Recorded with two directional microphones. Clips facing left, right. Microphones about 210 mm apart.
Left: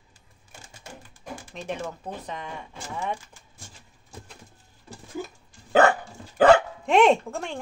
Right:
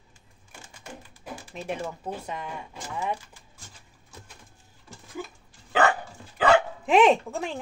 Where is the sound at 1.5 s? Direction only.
5° right (ahead or behind).